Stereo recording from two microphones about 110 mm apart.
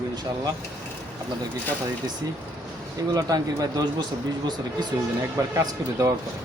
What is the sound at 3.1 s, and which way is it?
Speech, 35° right (ahead or behind).